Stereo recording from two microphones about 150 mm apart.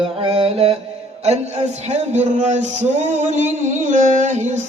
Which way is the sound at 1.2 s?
50° right (ahead or behind).